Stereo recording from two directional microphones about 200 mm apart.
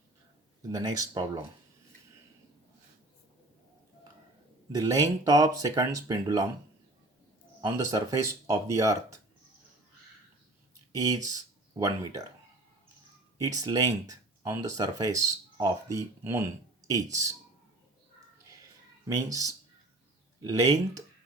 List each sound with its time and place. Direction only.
0.7 s speech: 15° right (ahead or behind)
4.7 s speech: 15° right (ahead or behind)
7.6 s speech: 15° right (ahead or behind)
10.9 s speech: 20° right (ahead or behind)
13.4 s speech: 20° right (ahead or behind)
19.0 s speech: 15° right (ahead or behind)